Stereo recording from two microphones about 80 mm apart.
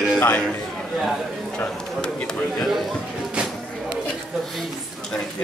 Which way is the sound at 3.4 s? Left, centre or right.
Centre.